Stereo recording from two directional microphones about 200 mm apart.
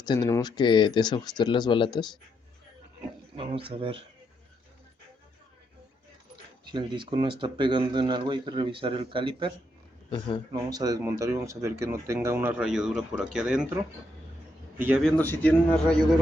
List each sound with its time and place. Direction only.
0.0 s speech: 20° left (ahead or behind)
3.3 s speech: 25° right (ahead or behind)
6.7 s speech: 20° right (ahead or behind)
10.1 s speech: 25° left (ahead or behind)
10.5 s speech: 20° right (ahead or behind)
14.8 s speech: 5° right (ahead or behind)
15.2 s speech: 10° left (ahead or behind)